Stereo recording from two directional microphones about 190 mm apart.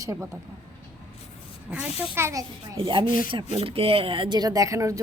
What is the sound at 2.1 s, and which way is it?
A woman's voice, 15° right (ahead or behind).